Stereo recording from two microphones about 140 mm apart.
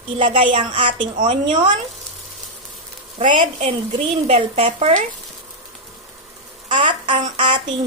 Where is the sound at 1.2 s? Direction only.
65° right (ahead or behind).